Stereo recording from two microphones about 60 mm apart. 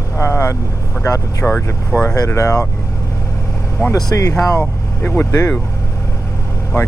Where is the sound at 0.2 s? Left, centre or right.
Left.